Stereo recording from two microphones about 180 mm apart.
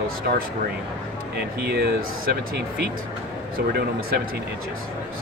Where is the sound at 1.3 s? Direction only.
65° right (ahead or behind).